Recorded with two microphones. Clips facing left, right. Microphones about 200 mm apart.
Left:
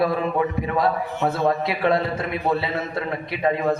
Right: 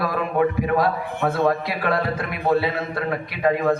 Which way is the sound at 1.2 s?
55° right (ahead or behind).